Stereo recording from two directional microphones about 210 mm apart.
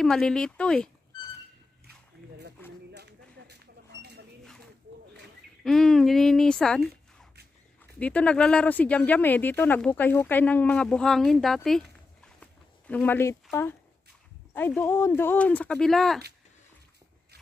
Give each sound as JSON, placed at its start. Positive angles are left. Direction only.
{"t": 0.0, "sound": "speech", "side_deg": 5}
{"t": 2.9, "sound": "a sound", "side_deg": -55}
{"t": 5.6, "sound": "speech", "side_deg": 0}
{"t": 8.0, "sound": "speech", "side_deg": 5}